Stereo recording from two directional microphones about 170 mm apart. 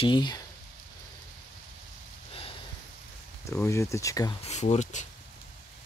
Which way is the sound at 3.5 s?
15° left (ahead or behind).